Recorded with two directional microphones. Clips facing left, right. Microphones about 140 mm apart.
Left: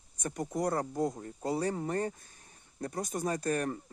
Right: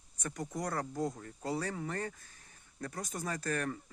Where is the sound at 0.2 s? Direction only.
30° left (ahead or behind).